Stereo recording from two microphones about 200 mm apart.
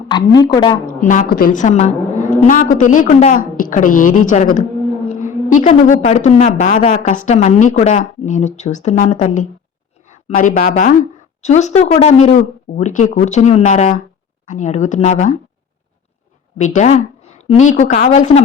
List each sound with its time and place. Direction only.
0.1 s a woman's voice: 20° left (ahead or behind)
1.0 s a woman's voice: 45° left (ahead or behind)
16.6 s a woman's voice: 35° left (ahead or behind)